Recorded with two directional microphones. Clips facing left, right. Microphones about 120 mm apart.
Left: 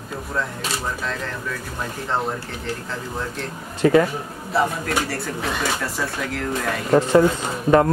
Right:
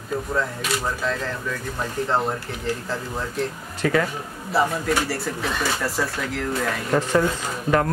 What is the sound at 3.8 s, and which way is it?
Speech, 30° left (ahead or behind).